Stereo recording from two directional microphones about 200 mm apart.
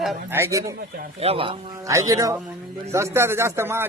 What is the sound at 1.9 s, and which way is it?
Speech, 15° right (ahead or behind).